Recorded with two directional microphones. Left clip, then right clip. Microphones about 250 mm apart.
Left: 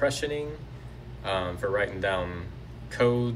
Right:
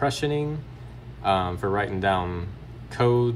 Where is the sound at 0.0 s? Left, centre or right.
Right.